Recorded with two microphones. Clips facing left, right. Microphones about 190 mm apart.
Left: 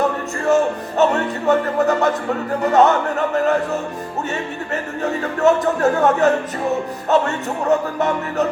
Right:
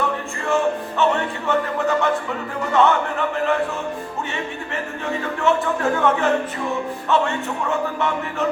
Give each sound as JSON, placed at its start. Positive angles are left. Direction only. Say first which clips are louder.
{"t": 0.4, "sound": "music", "louder": "left 4 dB", "side_deg": 40}
{"t": 5.2, "sound": "music", "louder": "left 5 dB", "side_deg": 40}